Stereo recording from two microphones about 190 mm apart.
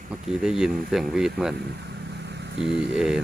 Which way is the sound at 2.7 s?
65° right (ahead or behind).